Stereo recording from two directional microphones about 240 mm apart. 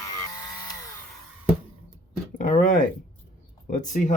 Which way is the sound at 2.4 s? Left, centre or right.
Left.